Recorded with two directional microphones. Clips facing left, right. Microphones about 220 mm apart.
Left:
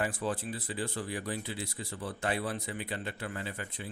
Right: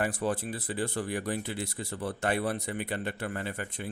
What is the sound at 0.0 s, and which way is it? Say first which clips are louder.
Speech: right 3 dB; 50° right (ahead or behind).